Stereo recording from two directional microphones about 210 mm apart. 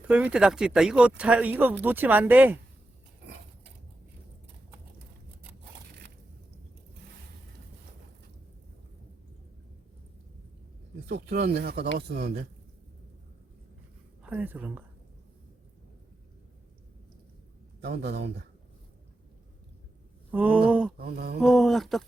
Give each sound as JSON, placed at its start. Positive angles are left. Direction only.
{"t": 0.1, "sound": "speech", "side_deg": -5}
{"t": 11.1, "sound": "speech", "side_deg": -50}
{"t": 14.2, "sound": "speech", "side_deg": -5}
{"t": 17.7, "sound": "speech", "side_deg": -50}
{"t": 20.3, "sound": "speech", "side_deg": -5}
{"t": 21.0, "sound": "speech", "side_deg": -45}
{"t": 21.4, "sound": "speech", "side_deg": 0}